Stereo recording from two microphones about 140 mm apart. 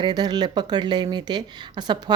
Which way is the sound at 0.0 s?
30° right (ahead or behind).